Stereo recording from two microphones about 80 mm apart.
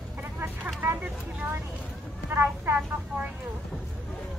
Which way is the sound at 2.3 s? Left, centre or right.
Right.